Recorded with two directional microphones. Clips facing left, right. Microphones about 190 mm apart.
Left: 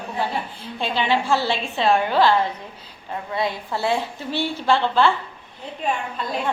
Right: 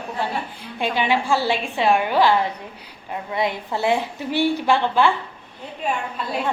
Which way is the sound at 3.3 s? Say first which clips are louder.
Right 1 dB; 20° right (ahead or behind).